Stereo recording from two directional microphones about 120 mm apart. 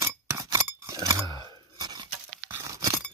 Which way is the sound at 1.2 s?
35° right (ahead or behind).